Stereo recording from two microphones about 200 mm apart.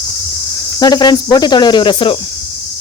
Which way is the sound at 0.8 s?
20° left (ahead or behind).